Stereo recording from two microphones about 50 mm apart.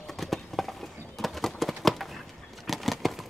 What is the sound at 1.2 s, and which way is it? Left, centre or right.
Horse, centre.